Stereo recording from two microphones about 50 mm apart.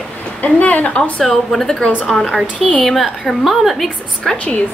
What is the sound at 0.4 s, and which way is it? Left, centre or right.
Speech, left.